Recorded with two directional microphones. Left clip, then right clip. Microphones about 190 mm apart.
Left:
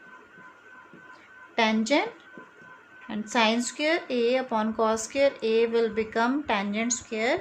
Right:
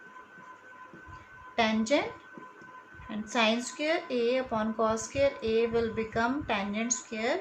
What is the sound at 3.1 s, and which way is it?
A woman's voice, 40° left (ahead or behind).